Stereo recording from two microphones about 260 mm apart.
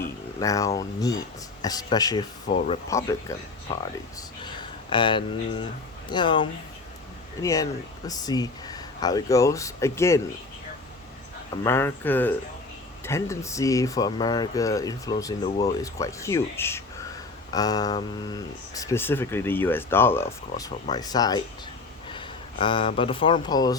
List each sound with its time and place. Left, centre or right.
0.0 s speech: centre
4.9 s speech: centre
11.5 s speech: centre